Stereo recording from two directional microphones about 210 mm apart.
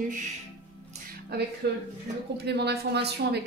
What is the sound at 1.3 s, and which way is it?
Speech, 50° right (ahead or behind).